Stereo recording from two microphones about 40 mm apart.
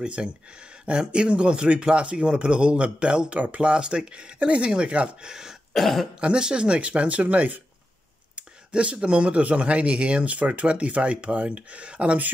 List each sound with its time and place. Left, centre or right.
0.0 s speech: right
5.2 s speech: centre
5.8 s cough: centre
6.2 s speech: right